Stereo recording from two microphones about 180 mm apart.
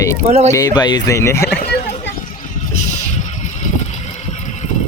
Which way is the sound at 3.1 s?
40° left (ahead or behind).